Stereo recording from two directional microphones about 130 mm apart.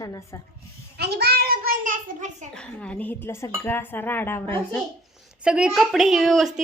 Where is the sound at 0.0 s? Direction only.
25° left (ahead or behind).